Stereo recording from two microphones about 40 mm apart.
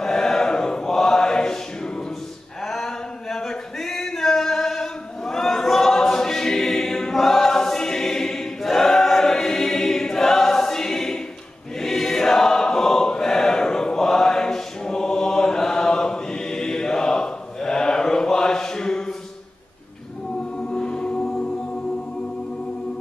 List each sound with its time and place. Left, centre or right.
0.0 s chant: centre
2.6 s a sound: centre
11.8 s choir: centre
20.5 s music: left